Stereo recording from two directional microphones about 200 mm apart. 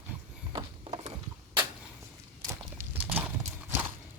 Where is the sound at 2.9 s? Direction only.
10° right (ahead or behind).